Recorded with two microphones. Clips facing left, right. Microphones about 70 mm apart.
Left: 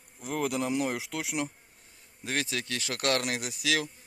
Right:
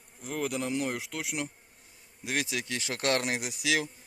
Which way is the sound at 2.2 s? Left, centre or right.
Centre.